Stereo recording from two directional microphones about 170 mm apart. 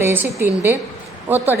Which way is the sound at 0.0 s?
15° right (ahead or behind).